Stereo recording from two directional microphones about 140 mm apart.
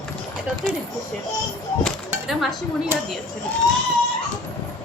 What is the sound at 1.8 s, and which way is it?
Music, centre (ahead or behind).